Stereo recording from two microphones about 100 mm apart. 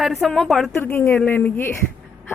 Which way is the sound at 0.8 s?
25° left (ahead or behind).